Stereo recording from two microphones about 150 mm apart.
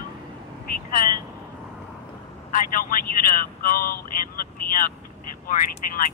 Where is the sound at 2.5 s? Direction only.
70° left (ahead or behind).